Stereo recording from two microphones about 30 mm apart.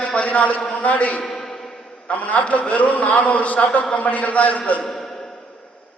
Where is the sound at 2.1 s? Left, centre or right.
Left.